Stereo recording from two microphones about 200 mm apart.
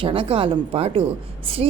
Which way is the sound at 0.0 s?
25° right (ahead or behind).